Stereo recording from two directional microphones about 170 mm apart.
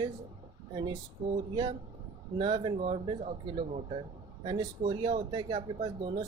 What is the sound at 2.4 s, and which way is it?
Speech, 30° right (ahead or behind).